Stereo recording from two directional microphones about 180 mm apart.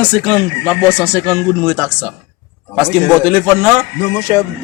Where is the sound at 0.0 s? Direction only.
5° left (ahead or behind).